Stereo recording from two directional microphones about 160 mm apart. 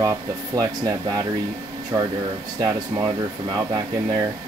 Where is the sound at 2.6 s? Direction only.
20° right (ahead or behind).